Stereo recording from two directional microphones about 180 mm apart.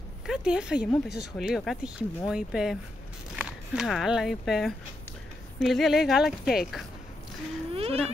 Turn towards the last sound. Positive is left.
turn(degrees=-30)  # may be behind; listen again after turning